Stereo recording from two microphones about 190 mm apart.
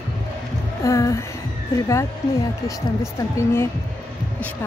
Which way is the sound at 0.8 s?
15° left (ahead or behind).